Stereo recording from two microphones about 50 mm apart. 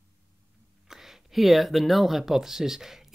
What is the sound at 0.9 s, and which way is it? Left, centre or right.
Speech, centre.